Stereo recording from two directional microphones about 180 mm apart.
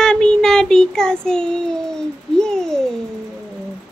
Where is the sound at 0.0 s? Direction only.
5° left (ahead or behind).